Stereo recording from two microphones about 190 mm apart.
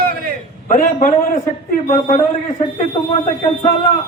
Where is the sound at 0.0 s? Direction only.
55° right (ahead or behind).